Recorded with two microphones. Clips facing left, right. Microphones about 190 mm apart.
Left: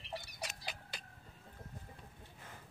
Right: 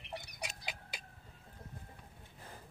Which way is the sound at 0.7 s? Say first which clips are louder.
Even; 10° right (ahead or behind).